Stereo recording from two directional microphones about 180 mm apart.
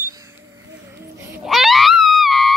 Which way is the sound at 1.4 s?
Centre (ahead or behind).